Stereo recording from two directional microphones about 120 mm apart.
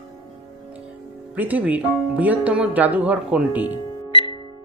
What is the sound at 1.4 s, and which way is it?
Speech, 15° right (ahead or behind).